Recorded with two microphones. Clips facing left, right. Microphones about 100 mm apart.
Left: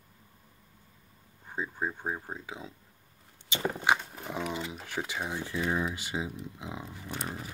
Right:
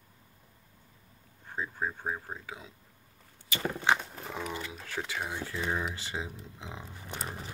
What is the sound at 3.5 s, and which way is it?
Speech, 15° left (ahead or behind).